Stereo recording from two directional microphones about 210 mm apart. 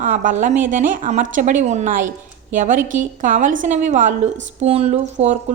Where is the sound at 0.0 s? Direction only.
40° right (ahead or behind).